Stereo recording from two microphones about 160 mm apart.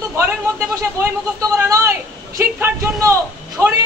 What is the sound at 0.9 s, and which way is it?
A man's voice, 15° right (ahead or behind).